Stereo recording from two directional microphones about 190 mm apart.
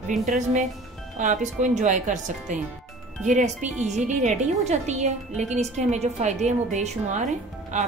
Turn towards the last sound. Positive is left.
turn(degrees=-40)  # may be behind; listen again after turning